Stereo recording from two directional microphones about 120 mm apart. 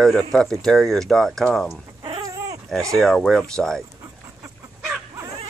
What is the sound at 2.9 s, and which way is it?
Speech, centre (ahead or behind).